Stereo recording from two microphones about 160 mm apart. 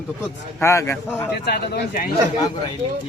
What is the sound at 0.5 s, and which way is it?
Speech, 15° left (ahead or behind).